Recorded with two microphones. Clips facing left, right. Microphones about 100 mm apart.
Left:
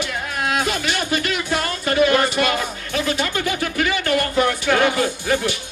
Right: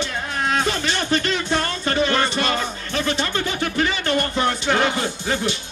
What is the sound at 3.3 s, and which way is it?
Music, 25° right (ahead or behind).